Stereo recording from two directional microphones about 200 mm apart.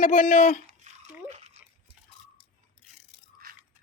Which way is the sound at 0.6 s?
35° right (ahead or behind).